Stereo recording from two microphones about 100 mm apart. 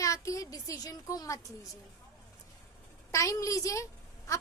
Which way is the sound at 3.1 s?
30° left (ahead or behind).